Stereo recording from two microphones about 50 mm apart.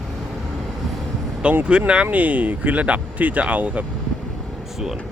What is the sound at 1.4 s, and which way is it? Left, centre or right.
Speech, right.